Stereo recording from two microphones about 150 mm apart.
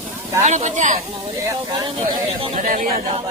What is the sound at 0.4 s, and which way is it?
Speech, 50° right (ahead or behind).